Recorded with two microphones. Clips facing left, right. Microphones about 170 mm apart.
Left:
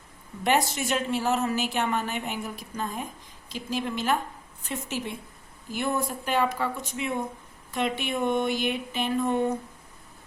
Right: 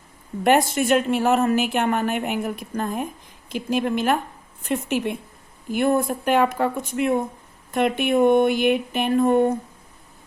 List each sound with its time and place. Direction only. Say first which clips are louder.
0.4 s a woman's voice: right 7 dB; 55° right (ahead or behind)